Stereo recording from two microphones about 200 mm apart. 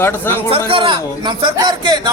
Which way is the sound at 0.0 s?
10° left (ahead or behind).